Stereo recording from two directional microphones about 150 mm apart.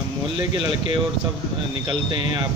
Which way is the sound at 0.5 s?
30° right (ahead or behind).